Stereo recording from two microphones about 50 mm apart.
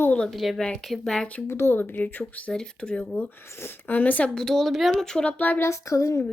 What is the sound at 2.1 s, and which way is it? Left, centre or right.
Speech, left.